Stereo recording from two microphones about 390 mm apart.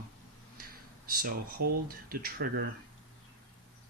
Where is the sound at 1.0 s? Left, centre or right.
Right.